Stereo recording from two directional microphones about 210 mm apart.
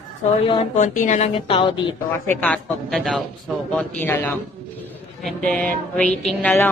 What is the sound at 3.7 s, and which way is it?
Music, 10° left (ahead or behind).